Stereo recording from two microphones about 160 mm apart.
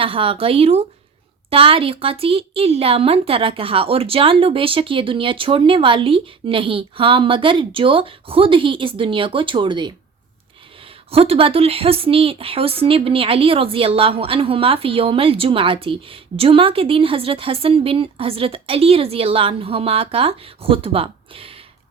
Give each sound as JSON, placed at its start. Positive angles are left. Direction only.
{"t": 0.0, "sound": "a woman's voice", "side_deg": -35}
{"t": 11.1, "sound": "a woman's voice", "side_deg": -35}